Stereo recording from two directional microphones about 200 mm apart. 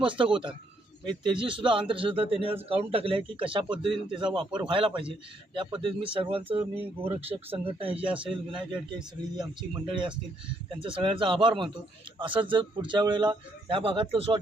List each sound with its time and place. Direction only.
0.0 s a man's voice: 25° right (ahead or behind)
6.7 s a man's voice: 10° right (ahead or behind)
7.6 s a man's voice: 25° right (ahead or behind)
8.0 s a man's voice: 5° right (ahead or behind)
9.6 s a man's voice: 25° right (ahead or behind)